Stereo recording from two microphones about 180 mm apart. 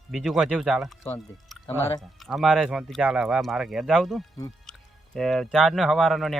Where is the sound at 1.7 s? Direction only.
15° left (ahead or behind).